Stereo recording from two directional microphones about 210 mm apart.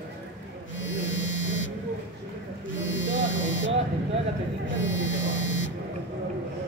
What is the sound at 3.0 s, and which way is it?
Electric shaver, 60° left (ahead or behind).